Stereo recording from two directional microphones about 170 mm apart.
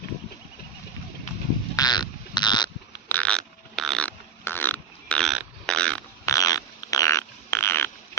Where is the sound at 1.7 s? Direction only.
25° left (ahead or behind).